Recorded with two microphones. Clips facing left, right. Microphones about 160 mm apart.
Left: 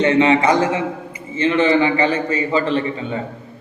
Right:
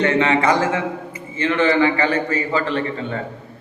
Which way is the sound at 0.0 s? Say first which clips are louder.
Left 3 dB; 20° left (ahead or behind).